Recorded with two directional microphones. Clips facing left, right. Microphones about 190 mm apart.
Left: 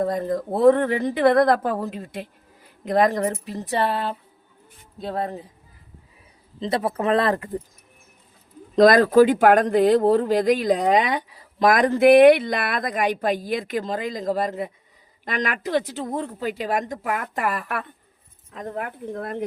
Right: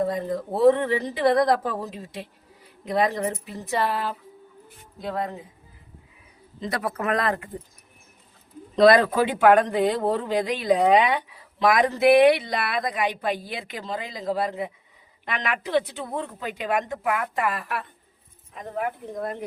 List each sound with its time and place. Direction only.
0.0 s speech: 45° left (ahead or behind)
6.6 s speech: 25° left (ahead or behind)
8.7 s speech: 45° left (ahead or behind)